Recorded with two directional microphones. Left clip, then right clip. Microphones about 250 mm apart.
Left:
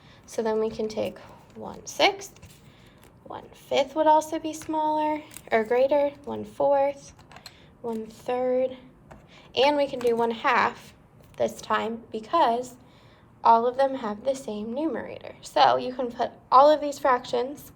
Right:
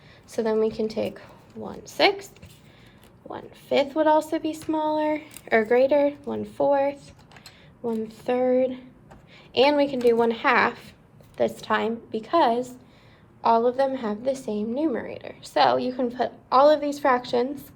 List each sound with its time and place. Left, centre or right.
0.3 s a woman's voice: centre